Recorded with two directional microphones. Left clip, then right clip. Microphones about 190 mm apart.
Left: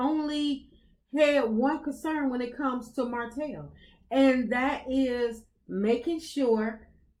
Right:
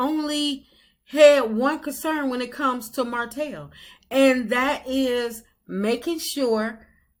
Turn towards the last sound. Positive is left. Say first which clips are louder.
# right 3 dB
turn(degrees=-20)  # may be behind; listen again after turning